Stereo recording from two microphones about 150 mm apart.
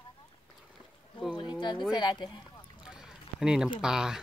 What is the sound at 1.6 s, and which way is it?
Speech, 30° left (ahead or behind).